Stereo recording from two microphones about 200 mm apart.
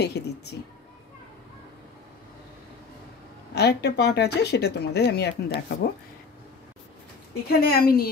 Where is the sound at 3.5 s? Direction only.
55° left (ahead or behind).